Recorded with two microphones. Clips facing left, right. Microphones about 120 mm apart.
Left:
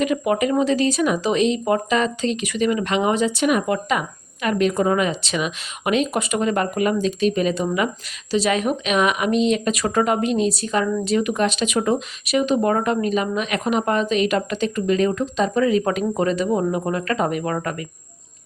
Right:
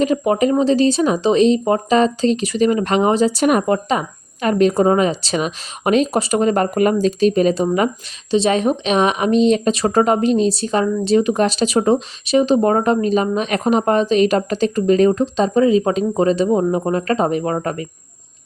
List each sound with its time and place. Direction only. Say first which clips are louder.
0.0 s speech: right 4 dB; 30° right (ahead or behind)